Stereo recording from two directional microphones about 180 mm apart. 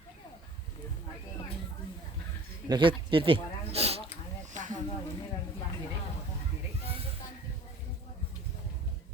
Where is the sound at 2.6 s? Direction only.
25° right (ahead or behind); by 4.8 s 45° right (ahead or behind).